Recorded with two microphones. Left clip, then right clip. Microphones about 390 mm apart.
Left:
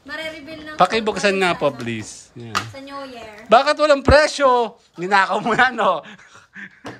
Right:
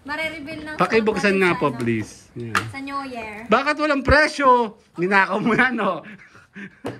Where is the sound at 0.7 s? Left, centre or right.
Centre.